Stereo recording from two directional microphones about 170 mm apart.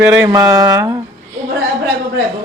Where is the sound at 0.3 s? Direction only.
20° right (ahead or behind).